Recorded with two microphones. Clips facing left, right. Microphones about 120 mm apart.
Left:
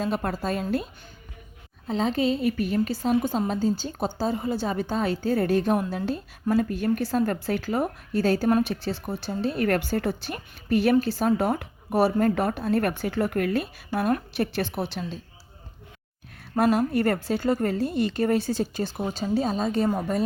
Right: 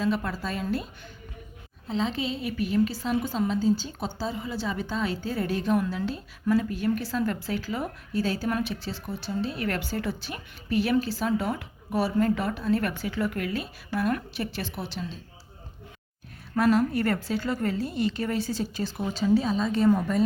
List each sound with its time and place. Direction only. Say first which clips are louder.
0.0 s a woman's voice: left 1 dB; 50° left (ahead or behind)
1.9 s a woman's voice: left 5 dB; 50° left (ahead or behind)
16.7 s a woman's voice: left 1 dB; 50° left (ahead or behind)
19.1 s a woman's voice: right 3 dB; 45° left (ahead or behind)